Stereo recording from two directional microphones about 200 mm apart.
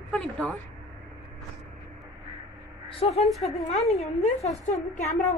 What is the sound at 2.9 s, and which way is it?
Speech, 30° left (ahead or behind).